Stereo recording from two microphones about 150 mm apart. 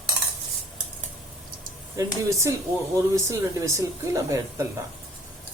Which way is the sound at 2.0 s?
20° right (ahead or behind).